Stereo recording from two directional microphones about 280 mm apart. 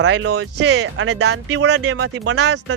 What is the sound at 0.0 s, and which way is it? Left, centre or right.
Speech, right.